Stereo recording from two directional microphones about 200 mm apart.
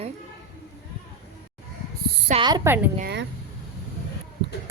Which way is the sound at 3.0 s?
60° right (ahead or behind).